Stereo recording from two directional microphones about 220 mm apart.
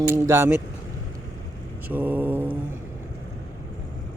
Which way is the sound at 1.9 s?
5° right (ahead or behind).